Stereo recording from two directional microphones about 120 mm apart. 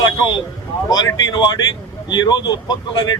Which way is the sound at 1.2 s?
35° left (ahead or behind).